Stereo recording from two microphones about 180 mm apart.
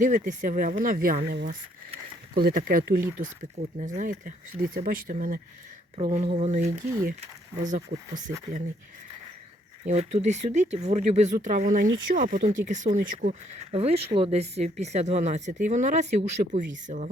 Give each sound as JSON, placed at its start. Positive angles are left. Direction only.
{"t": 0.0, "sound": "speech", "side_deg": -45}
{"t": 3.6, "sound": "speech", "side_deg": -45}
{"t": 9.8, "sound": "speech", "side_deg": -40}